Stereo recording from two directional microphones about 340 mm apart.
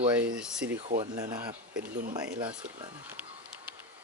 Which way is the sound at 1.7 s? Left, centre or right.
Right.